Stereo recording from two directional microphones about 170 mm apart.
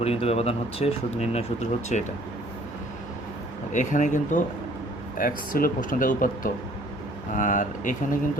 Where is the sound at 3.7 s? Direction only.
45° left (ahead or behind).